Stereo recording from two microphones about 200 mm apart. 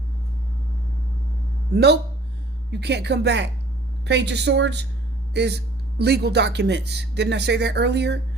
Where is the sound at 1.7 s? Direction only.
55° right (ahead or behind).